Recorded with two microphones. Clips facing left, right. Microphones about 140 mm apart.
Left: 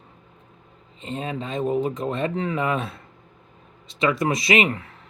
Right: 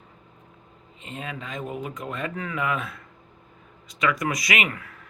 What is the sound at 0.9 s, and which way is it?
Speech, 30° left (ahead or behind).